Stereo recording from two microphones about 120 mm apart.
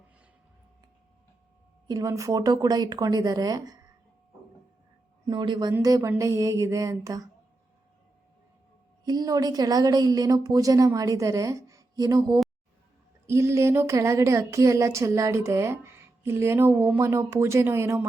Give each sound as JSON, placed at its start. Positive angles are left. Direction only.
{"t": 1.9, "sound": "a woman's voice", "side_deg": -30}
{"t": 5.2, "sound": "a woman's voice", "side_deg": -35}
{"t": 9.0, "sound": "a woman's voice", "side_deg": -35}